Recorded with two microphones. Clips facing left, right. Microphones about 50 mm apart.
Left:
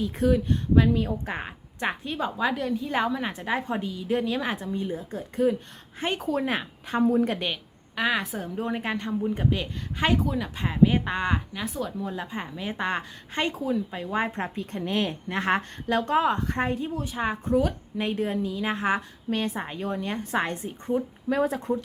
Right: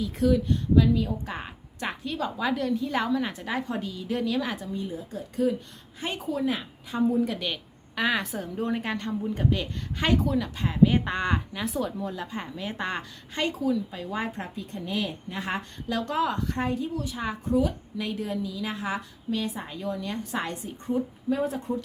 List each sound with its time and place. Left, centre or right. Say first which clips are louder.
0.0 s a woman's voice: even; left
6.1 s a woman's voice: even; left
7.5 s a woman's voice: even; centre
10.5 s speech: even; left
10.8 s speech: even; centre
12.0 s a woman's voice: left 1 dB; centre
12.9 s a woman's voice: left 3 dB; left
14.5 s a woman's voice: left 3 dB; left
15.9 s a woman's voice: left 4 dB; left
21.2 s speech: left 3 dB; left